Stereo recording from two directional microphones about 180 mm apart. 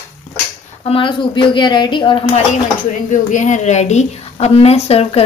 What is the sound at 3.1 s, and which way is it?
A woman's voice, 45° left (ahead or behind).